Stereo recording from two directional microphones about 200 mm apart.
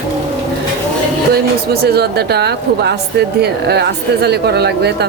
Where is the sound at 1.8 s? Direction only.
55° right (ahead or behind).